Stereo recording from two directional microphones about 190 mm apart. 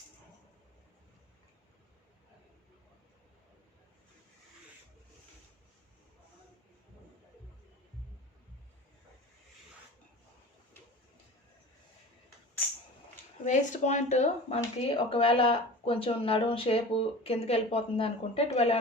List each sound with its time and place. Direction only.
13.4 s speech: 40° left (ahead or behind)